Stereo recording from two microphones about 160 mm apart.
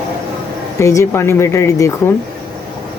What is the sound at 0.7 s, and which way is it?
Speech, 20° left (ahead or behind).